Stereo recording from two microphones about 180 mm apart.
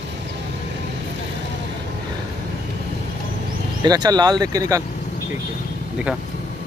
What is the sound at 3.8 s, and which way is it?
Speech, 20° right (ahead or behind).